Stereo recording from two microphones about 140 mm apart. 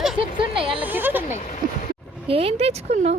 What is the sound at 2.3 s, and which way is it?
Speech, 45° right (ahead or behind).